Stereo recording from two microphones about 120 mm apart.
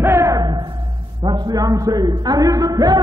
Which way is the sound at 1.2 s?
45° right (ahead or behind).